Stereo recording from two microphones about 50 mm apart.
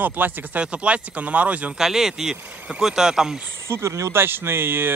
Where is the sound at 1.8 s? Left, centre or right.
Centre.